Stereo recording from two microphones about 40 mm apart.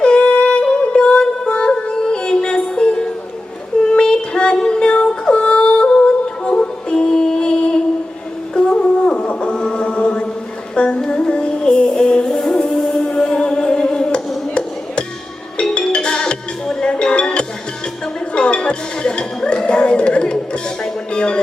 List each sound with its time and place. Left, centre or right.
0.0 s music: left
15.7 s music: left